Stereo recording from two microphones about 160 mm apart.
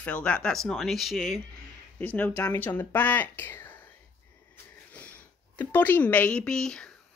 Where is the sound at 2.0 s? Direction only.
10° left (ahead or behind).